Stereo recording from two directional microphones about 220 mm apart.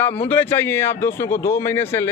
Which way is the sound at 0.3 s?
10° left (ahead or behind).